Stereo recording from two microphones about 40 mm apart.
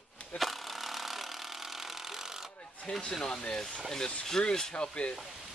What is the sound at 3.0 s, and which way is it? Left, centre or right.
Speech, centre.